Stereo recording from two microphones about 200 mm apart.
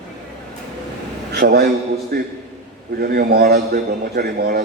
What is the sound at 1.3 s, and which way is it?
A man's voice, 55° right (ahead or behind).